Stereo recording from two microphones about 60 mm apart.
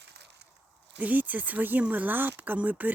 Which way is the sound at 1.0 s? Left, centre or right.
Right.